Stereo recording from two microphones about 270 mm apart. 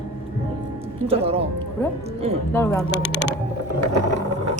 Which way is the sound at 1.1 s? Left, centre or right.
Right.